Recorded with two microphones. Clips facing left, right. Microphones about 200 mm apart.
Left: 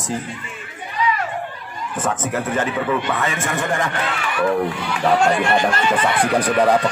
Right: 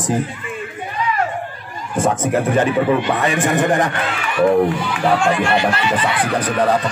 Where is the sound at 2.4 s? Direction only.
15° right (ahead or behind).